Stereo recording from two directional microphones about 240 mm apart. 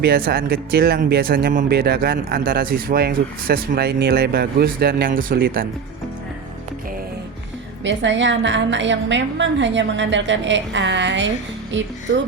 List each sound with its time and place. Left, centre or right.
0.0 s speech: right
7.9 s a woman's voice: right